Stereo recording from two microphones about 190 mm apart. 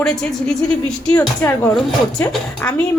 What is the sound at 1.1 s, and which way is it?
A woman's voice, 10° left (ahead or behind).